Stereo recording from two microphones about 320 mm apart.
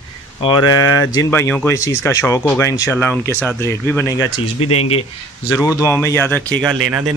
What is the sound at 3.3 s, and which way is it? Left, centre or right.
Speech, centre.